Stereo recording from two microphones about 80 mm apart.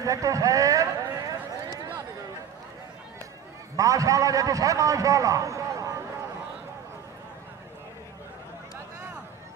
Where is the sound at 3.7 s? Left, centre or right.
Right.